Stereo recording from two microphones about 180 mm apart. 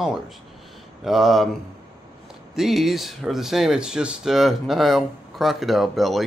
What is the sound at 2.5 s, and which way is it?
Speech, centre (ahead or behind).